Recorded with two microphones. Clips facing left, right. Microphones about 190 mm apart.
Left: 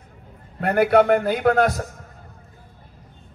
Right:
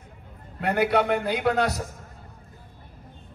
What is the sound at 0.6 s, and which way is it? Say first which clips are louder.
A man's voice: left 6 dB; 50° left (ahead or behind).